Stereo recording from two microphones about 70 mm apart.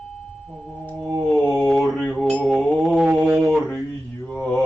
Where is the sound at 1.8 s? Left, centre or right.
Centre.